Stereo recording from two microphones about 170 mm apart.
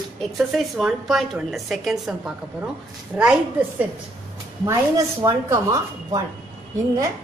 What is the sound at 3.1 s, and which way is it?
Speech, 15° right (ahead or behind).